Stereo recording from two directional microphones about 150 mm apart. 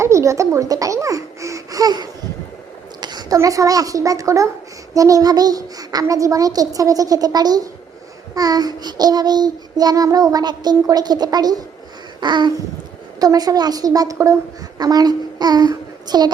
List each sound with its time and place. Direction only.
0.0 s a woman's voice: 20° right (ahead or behind)
4.9 s child singing: 25° right (ahead or behind)
14.8 s a child's voice: 25° right (ahead or behind)